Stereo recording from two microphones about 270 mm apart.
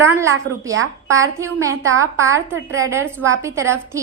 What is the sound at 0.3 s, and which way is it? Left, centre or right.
Speech, right.